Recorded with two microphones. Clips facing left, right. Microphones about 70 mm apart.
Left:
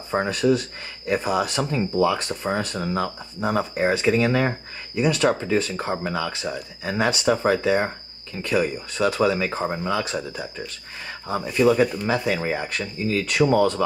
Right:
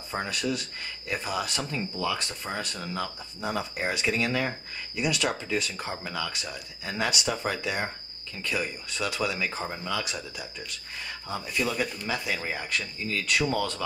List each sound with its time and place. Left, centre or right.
0.1 s speech: left
12.0 s speech: left